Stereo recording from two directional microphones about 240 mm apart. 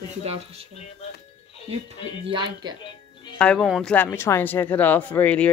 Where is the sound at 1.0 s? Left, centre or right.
Left.